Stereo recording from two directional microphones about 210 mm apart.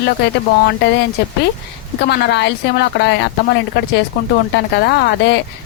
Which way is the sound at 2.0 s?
55° left (ahead or behind).